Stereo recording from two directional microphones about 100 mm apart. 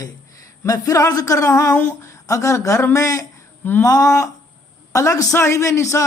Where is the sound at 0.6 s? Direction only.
35° left (ahead or behind).